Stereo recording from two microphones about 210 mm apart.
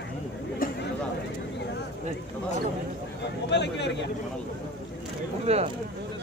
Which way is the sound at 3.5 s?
55° left (ahead or behind).